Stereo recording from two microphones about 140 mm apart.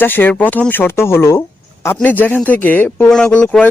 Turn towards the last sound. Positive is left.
turn(degrees=10)  # may be behind; listen again after turning